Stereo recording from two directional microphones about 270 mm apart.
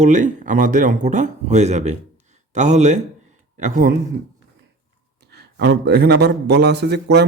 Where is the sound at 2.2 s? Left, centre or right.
Right.